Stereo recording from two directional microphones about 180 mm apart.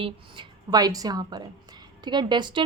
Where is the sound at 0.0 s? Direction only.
25° right (ahead or behind).